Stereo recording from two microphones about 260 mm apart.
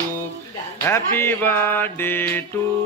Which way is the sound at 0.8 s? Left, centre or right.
Centre.